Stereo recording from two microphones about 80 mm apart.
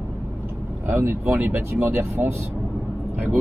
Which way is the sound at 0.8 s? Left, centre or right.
Right.